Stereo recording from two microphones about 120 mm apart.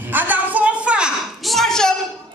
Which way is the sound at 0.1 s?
15° right (ahead or behind).